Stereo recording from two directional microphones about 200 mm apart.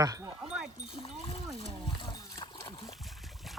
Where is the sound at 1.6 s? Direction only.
25° left (ahead or behind).